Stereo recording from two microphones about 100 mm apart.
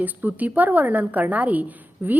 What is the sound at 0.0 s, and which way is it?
A woman's voice, 15° right (ahead or behind).